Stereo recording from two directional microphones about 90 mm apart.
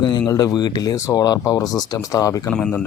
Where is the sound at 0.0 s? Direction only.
60° left (ahead or behind).